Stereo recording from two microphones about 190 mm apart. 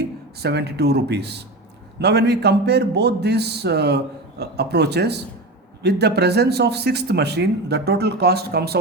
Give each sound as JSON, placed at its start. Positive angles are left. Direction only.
{"t": 0.0, "sound": "a man's voice", "side_deg": -60}